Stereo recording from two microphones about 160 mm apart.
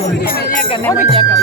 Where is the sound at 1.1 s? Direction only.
35° right (ahead or behind).